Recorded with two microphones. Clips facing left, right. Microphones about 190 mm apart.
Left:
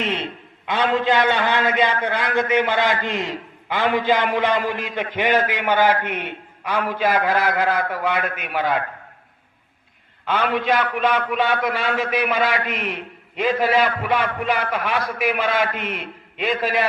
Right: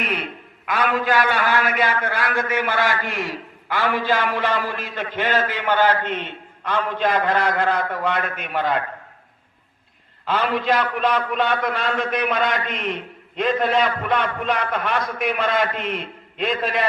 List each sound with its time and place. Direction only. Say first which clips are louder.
0.0 s a man's voice: left 2 dB; 25° left (ahead or behind); by 8.8 s 5° left (ahead or behind)
10.2 s a man's voice: even; centre (ahead or behind)